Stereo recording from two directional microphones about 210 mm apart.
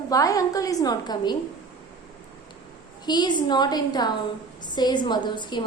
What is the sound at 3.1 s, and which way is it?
A woman's voice, 20° left (ahead or behind).